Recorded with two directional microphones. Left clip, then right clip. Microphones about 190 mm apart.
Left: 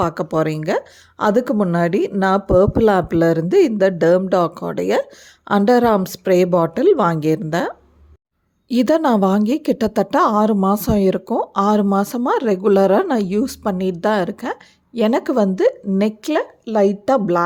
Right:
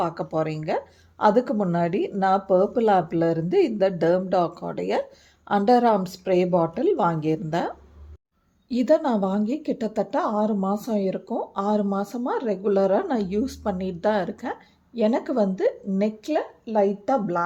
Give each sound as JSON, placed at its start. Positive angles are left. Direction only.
{"t": 0.0, "sound": "speech", "side_deg": 35}
{"t": 8.7, "sound": "a woman's voice", "side_deg": 45}